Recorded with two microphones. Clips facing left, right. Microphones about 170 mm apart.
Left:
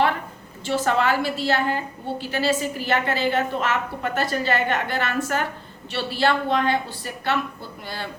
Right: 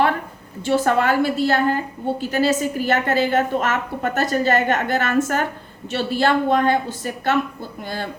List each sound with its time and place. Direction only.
0.6 s a woman's voice: 50° right (ahead or behind)